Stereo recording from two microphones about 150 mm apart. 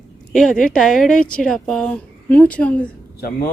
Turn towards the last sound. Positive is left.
turn(degrees=85)